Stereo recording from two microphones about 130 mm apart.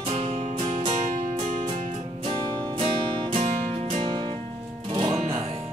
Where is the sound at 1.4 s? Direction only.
60° right (ahead or behind).